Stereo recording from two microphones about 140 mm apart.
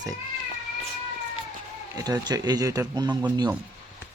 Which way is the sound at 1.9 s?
25° right (ahead or behind).